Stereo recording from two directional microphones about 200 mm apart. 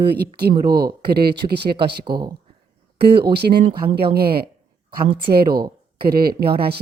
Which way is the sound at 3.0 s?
55° right (ahead or behind).